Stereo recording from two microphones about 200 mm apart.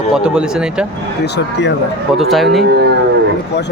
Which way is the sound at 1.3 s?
60° left (ahead or behind).